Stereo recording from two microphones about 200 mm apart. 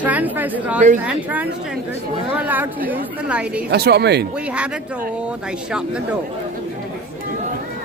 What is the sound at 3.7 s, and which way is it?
Speech, 55° right (ahead or behind).